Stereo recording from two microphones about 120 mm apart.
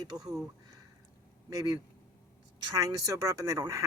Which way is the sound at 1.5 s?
30° right (ahead or behind).